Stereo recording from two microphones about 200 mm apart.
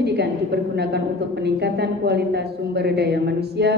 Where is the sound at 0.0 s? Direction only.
55° right (ahead or behind).